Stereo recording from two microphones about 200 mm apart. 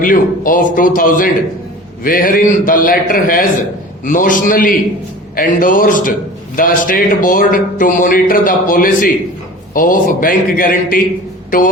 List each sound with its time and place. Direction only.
0.0 s a man's voice: 45° left (ahead or behind)